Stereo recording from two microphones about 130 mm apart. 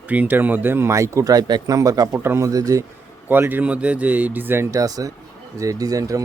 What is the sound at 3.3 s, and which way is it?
Speech, 15° right (ahead or behind).